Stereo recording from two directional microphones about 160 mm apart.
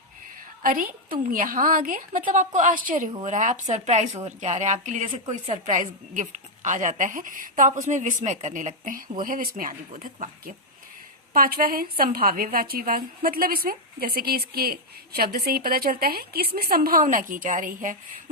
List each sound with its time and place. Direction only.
0.6 s a woman's voice: 60° right (ahead or behind)
5.0 s speech: 30° right (ahead or behind)
5.3 s a woman's voice: 50° right (ahead or behind)